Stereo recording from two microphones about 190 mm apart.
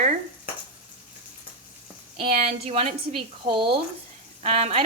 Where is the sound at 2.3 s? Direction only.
45° right (ahead or behind).